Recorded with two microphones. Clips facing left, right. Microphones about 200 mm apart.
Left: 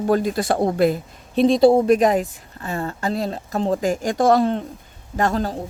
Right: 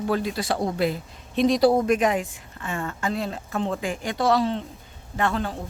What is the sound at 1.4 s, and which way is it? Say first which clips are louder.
Speech: left 5 dB; 25° left (ahead or behind).